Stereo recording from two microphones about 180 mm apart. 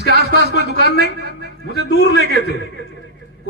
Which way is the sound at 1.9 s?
70° left (ahead or behind).